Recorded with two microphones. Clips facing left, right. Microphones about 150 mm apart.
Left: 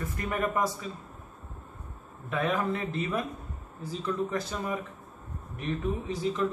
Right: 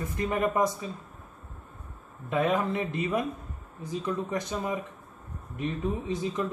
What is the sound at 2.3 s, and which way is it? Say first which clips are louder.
Speech: right 3 dB; 20° right (ahead or behind).